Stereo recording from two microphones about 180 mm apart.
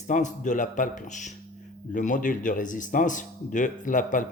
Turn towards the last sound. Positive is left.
turn(degrees=45)  # may be behind; listen again after turning